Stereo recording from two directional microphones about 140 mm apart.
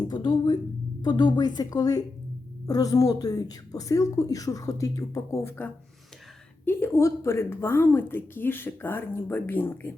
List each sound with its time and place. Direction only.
0.1 s a woman's voice: 35° left (ahead or behind); by 9.7 s 15° left (ahead or behind)